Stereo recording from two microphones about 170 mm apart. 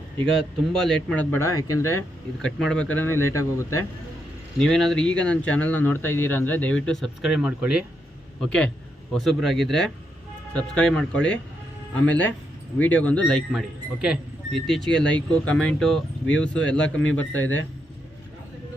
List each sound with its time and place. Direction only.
0.3 s speech: 5° left (ahead or behind)
2.4 s speech: 5° left (ahead or behind)
4.6 s speech: centre (ahead or behind)
8.4 s speech: 5° left (ahead or behind)